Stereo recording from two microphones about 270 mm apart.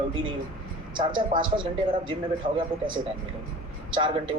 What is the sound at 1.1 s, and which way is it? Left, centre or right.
Speech, centre.